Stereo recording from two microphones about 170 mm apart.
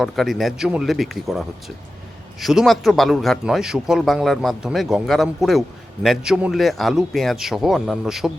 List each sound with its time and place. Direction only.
0.0 s a man's voice: centre (ahead or behind)